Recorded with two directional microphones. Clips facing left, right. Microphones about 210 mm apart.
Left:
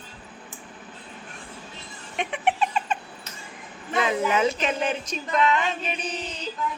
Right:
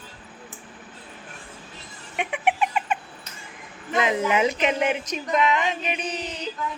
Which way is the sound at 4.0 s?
20° right (ahead or behind).